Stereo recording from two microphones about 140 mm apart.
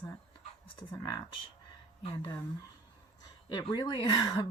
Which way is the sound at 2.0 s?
40° left (ahead or behind).